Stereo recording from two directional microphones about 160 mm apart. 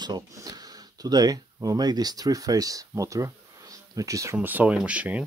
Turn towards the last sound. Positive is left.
turn(degrees=-5)  # may be behind; listen again after turning